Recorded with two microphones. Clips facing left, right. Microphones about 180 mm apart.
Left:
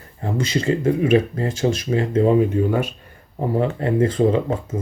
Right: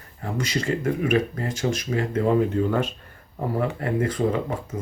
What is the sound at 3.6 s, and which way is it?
Speech, 25° left (ahead or behind).